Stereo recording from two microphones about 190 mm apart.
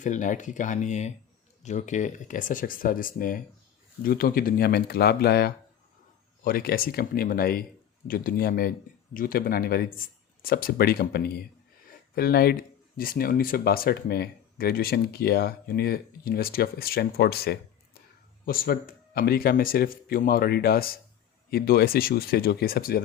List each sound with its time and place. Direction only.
0.0 s speech: 40° left (ahead or behind)